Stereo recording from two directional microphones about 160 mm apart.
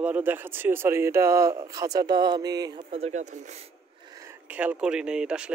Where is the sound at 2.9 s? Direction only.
45° right (ahead or behind).